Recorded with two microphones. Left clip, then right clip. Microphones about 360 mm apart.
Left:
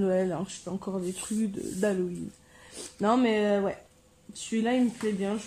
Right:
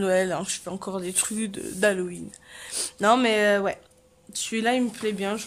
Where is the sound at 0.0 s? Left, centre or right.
Right.